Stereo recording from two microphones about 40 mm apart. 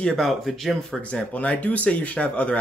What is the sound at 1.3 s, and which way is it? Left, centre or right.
Speech, left.